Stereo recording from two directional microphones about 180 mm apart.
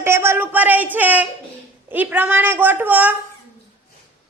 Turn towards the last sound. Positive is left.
turn(degrees=-10)  # may be behind; listen again after turning